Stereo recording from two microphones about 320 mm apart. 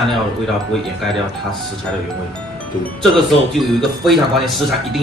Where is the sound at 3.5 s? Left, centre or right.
Centre.